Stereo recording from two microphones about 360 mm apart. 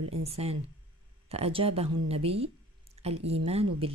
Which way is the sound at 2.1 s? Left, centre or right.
Centre.